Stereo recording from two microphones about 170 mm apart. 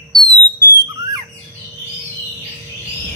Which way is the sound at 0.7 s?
25° right (ahead or behind).